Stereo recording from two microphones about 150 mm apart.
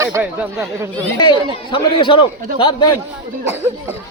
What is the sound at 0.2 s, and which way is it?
Speech, 10° right (ahead or behind).